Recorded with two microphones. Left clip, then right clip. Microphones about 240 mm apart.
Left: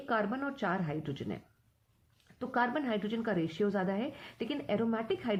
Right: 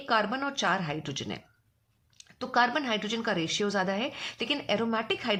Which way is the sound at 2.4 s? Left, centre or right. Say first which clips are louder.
Right 6 dB; right.